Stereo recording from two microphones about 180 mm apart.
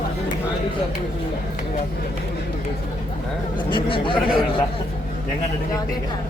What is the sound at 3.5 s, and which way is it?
Speech, 30° left (ahead or behind).